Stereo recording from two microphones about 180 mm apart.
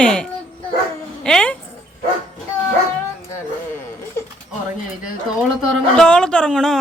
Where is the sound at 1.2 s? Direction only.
5° left (ahead or behind).